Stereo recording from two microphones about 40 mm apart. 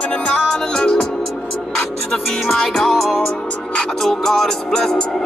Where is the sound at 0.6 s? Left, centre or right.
Centre.